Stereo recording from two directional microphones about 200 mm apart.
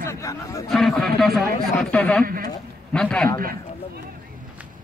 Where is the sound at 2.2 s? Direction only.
45° right (ahead or behind).